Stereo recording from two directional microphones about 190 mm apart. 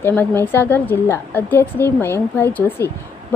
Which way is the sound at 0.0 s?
10° left (ahead or behind).